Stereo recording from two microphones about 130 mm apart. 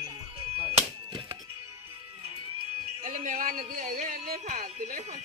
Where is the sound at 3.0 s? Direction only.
85° right.